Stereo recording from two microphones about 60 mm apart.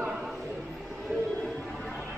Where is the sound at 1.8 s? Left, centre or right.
Left.